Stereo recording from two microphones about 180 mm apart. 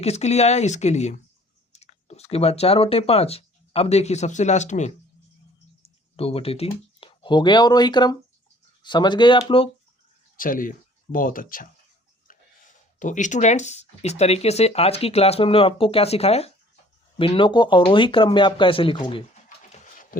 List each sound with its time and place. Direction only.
0.0 s speech: 35° left (ahead or behind)
10.3 s speech: 50° left (ahead or behind)
13.0 s speech: 45° left (ahead or behind); by 19.2 s 25° left (ahead or behind)
19.7 s a sound: 45° left (ahead or behind)